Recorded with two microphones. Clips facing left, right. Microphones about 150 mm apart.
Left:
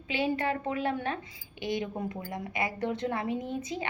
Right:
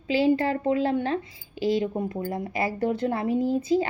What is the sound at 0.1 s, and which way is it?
A woman's voice, 30° right (ahead or behind).